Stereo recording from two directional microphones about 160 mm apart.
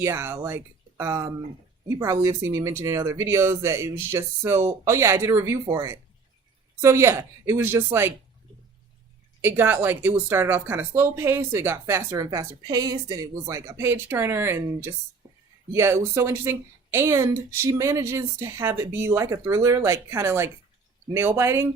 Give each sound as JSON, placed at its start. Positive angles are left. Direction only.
{"t": 0.0, "sound": "speech", "side_deg": -15}
{"t": 9.4, "sound": "speech", "side_deg": -15}
{"t": 15.2, "sound": "a sound", "side_deg": -15}
{"t": 15.7, "sound": "speech", "side_deg": -15}